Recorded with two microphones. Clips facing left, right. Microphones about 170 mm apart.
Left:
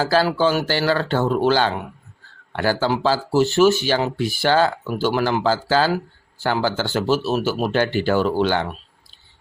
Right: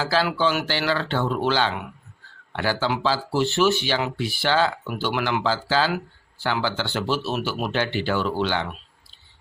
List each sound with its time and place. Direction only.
0.0 s speech: 45° left (ahead or behind)